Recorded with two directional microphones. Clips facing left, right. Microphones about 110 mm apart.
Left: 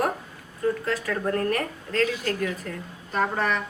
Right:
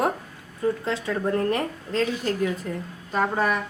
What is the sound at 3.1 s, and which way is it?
Speech, 10° right (ahead or behind).